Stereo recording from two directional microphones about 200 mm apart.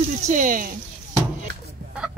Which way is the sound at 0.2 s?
40° right (ahead or behind).